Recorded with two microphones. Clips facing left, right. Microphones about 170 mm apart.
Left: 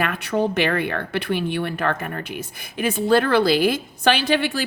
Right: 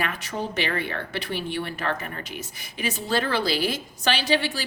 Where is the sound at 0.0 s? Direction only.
60° left (ahead or behind).